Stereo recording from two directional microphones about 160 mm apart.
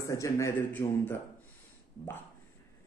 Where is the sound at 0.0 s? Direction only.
20° left (ahead or behind).